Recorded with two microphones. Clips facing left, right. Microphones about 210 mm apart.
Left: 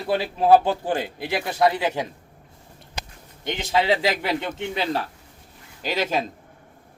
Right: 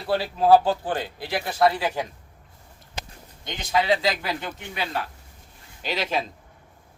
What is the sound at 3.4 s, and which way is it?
A man's voice, 25° left (ahead or behind).